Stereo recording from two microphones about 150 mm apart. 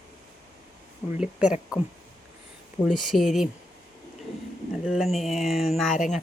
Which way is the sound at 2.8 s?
Centre (ahead or behind).